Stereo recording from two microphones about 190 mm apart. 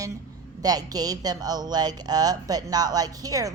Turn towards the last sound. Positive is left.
turn(degrees=-20)  # may be behind; listen again after turning